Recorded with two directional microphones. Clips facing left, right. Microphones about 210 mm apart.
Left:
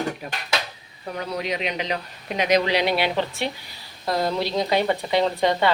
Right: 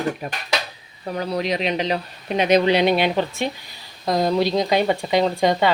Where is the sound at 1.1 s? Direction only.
35° right (ahead or behind).